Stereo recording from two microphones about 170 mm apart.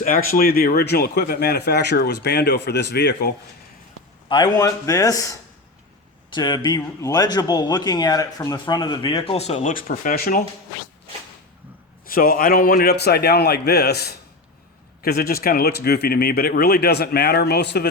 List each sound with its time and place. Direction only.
0.0 s speech: 55° left (ahead or behind); by 3.3 s 75° left (ahead or behind)
4.3 s speech: 20° left (ahead or behind); by 10.4 s 60° left (ahead or behind)
12.0 s speech: 60° left (ahead or behind); by 17.8 s 80° left